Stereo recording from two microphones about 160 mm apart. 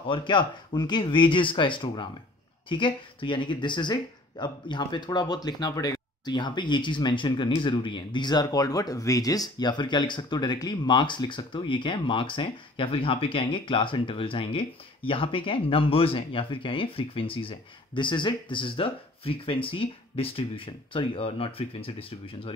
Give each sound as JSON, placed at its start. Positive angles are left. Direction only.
{"t": 0.1, "sound": "speech", "side_deg": 30}